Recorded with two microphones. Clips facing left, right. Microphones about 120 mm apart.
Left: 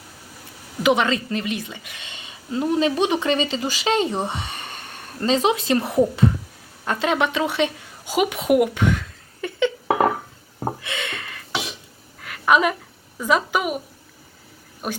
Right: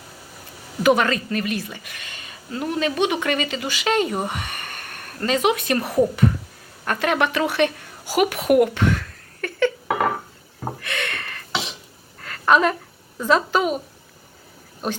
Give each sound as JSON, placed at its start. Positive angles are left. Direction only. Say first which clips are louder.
{"t": 0.8, "sound": "a woman's voice", "louder": "right 1 dB", "side_deg": 20}
{"t": 10.6, "sound": "a sound", "louder": "left 1 dB", "side_deg": 20}
{"t": 13.1, "sound": "a woman's voice", "louder": "right 2 dB", "side_deg": 10}
{"t": 14.8, "sound": "a woman's voice", "louder": "right 2 dB", "side_deg": 5}